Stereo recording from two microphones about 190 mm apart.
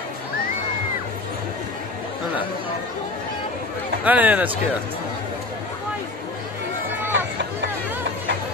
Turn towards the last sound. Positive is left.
turn(degrees=-65)  # may be behind; listen again after turning